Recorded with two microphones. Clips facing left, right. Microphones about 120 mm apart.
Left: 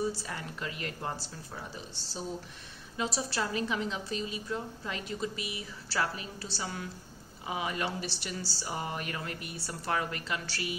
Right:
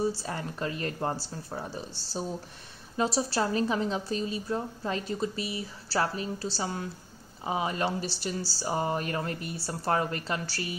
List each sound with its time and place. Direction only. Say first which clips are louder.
0.2 s a woman's voice: right 5 dB; 35° right (ahead or behind)